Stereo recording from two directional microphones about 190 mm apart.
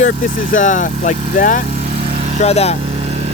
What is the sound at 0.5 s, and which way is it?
Speech, 40° left (ahead or behind).